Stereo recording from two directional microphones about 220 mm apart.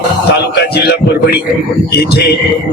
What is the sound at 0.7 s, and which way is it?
A man's voice, 45° left (ahead or behind).